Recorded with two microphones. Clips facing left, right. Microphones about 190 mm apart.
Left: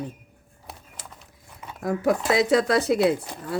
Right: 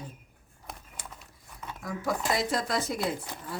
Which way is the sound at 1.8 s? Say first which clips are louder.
Left 9 dB; 60° left (ahead or behind).